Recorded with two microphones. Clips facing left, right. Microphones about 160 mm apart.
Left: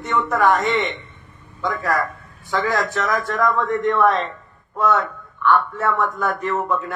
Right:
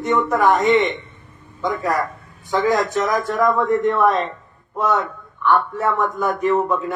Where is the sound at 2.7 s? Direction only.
15° right (ahead or behind).